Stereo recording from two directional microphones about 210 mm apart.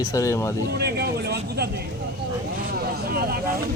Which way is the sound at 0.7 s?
50° right (ahead or behind).